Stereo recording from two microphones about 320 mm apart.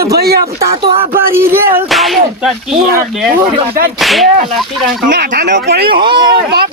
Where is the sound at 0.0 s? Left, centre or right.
Right.